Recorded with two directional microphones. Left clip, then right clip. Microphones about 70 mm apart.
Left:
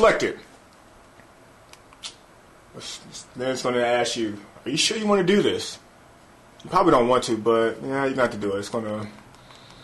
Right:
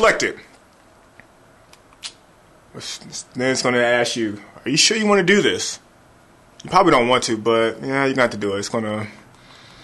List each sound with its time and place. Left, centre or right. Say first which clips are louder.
0.0 s speech: right 2 dB; right
2.8 s speech: right 5 dB; right